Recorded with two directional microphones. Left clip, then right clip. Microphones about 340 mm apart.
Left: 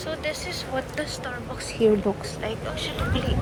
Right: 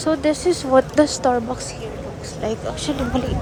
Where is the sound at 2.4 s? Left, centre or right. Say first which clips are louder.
Right 7 dB; centre.